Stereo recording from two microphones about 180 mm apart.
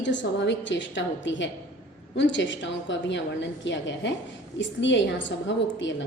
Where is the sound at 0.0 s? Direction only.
80° left.